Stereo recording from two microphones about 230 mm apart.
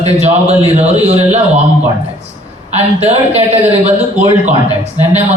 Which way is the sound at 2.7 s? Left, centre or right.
Right.